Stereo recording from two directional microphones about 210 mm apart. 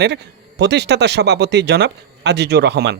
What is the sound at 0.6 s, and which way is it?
Speech, 55° right (ahead or behind).